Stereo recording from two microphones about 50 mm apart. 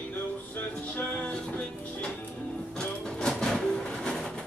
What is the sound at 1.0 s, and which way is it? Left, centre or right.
Music, left.